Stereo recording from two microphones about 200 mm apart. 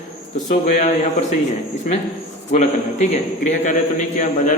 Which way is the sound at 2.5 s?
35° left (ahead or behind).